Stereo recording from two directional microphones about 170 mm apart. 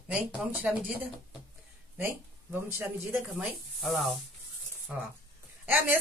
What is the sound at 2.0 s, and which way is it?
Speech, 10° right (ahead or behind).